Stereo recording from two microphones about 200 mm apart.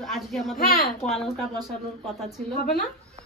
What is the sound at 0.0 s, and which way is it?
Speech, centre (ahead or behind).